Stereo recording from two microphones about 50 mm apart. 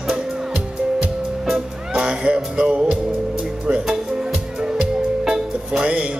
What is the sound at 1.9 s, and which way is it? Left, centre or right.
Music, right.